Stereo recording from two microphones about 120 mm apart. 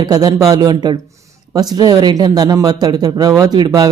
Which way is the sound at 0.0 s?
30° right (ahead or behind).